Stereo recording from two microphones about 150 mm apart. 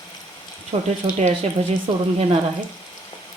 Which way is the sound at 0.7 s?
40° right (ahead or behind).